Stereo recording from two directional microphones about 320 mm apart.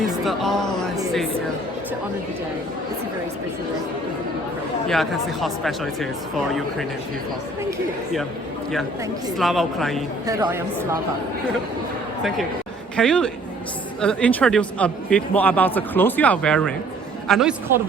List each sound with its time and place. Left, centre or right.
0.0 s speech: centre
4.9 s a man's voice: centre
9.4 s a man's voice: centre
10.2 s a woman's voice: centre
13.0 s a man's voice: centre